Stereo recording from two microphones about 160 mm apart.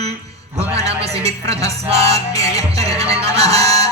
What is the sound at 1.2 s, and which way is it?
Music, 40° right (ahead or behind).